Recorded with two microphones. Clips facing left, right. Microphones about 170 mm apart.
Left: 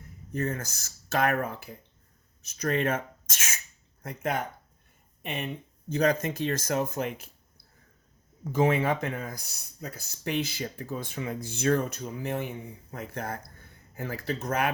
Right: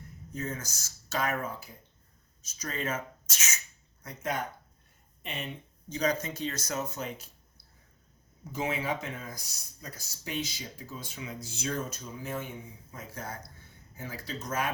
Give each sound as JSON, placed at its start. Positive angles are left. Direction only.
{"t": 0.3, "sound": "speech", "side_deg": 60}
{"t": 8.5, "sound": "speech", "side_deg": 55}